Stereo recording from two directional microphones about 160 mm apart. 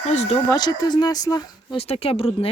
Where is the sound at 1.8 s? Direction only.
40° left (ahead or behind).